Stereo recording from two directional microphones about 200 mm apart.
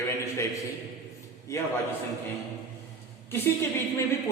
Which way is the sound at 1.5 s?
15° left (ahead or behind).